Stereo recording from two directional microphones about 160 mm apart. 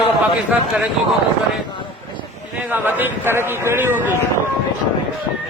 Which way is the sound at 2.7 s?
10° right (ahead or behind).